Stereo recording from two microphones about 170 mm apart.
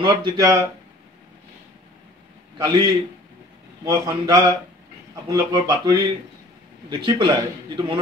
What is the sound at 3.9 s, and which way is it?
A man's voice, 20° right (ahead or behind).